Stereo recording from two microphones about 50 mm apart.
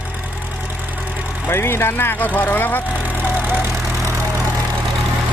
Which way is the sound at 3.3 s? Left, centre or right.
Right.